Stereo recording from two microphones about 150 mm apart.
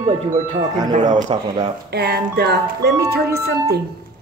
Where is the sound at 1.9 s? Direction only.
90° right.